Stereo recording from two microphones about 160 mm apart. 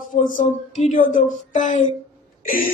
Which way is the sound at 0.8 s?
55° left (ahead or behind).